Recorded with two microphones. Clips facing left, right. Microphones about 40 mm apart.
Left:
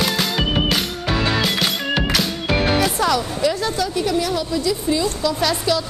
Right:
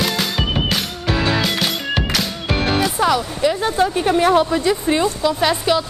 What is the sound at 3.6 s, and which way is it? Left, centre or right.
Speech, right.